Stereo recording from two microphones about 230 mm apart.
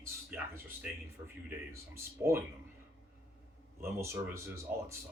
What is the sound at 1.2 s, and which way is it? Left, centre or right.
Speech, centre.